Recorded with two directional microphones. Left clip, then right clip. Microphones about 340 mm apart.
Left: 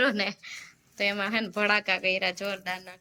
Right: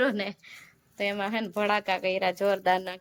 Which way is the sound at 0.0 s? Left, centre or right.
Centre.